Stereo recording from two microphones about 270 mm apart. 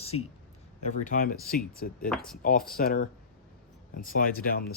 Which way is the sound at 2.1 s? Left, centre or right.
Centre.